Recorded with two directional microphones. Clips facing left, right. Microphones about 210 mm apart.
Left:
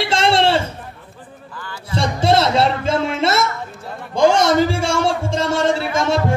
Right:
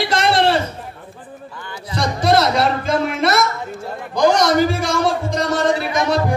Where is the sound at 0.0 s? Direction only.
25° left (ahead or behind).